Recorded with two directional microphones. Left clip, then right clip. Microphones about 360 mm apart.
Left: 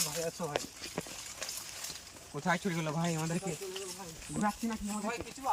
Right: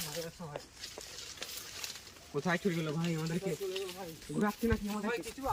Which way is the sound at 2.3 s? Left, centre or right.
Centre.